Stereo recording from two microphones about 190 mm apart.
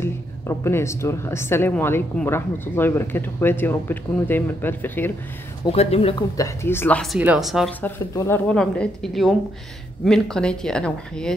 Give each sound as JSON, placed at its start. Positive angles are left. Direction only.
{"t": 0.0, "sound": "speech", "side_deg": 15}
{"t": 5.7, "sound": "speech", "side_deg": 30}
{"t": 6.3, "sound": "a woman's voice", "side_deg": 15}
{"t": 7.8, "sound": "a woman's voice", "side_deg": 10}